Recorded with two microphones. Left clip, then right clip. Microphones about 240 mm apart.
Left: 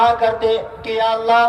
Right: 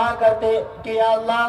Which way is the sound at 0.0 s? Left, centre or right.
Left.